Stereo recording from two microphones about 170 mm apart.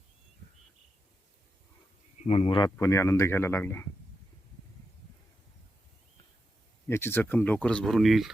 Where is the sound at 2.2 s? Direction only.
35° left (ahead or behind).